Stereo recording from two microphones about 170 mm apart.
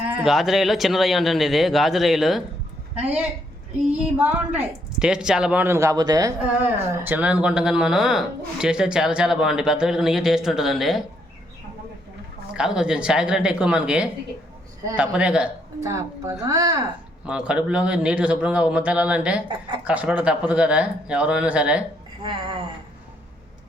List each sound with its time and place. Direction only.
0.0 s speech: 10° right (ahead or behind)
12.5 s speech: 5° right (ahead or behind); by 16.7 s 20° right (ahead or behind)
17.2 s speech: 5° right (ahead or behind)
22.2 s speech: 30° right (ahead or behind)